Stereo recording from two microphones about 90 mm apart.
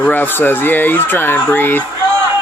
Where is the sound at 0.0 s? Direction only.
20° left (ahead or behind).